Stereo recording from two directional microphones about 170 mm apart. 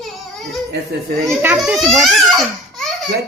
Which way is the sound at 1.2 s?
10° right (ahead or behind).